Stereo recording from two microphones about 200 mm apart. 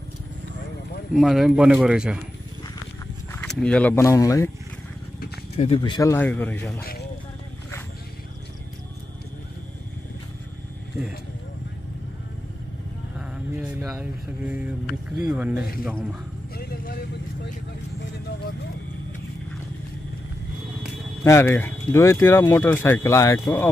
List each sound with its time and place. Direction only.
1.1 s speech: centre (ahead or behind)
3.3 s speech: 5° left (ahead or behind)
5.6 s speech: 25° left (ahead or behind)
6.1 s speech: 10° left (ahead or behind)
6.8 s a sound: 50° left (ahead or behind)
13.6 s speech: 5° right (ahead or behind)
21.2 s speech: 10° left (ahead or behind)